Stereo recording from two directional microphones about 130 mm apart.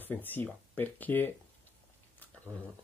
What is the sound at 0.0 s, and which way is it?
Speech, 15° left (ahead or behind).